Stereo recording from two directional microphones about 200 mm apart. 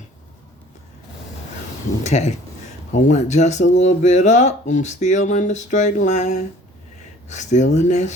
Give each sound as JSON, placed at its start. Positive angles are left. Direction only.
{"t": 2.0, "sound": "speech", "side_deg": 35}